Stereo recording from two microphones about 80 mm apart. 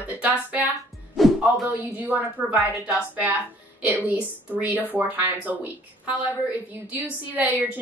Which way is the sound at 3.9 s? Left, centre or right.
Right.